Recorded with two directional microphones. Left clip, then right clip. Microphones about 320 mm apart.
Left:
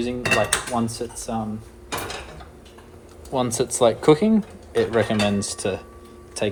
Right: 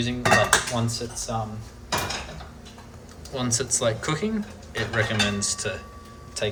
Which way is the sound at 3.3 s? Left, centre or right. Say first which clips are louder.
Left 5 dB; centre.